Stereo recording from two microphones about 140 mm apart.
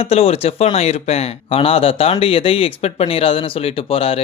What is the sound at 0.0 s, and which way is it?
Speech, 45° left (ahead or behind).